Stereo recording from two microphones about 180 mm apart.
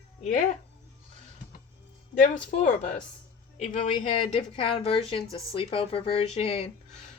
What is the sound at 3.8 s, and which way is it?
Speech, 40° left (ahead or behind).